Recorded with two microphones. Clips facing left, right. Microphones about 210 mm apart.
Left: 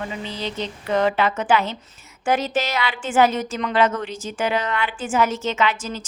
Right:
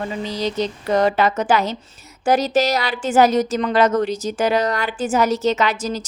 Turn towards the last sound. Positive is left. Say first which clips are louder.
# right 4 dB
turn(degrees=-40)  # may be behind; listen again after turning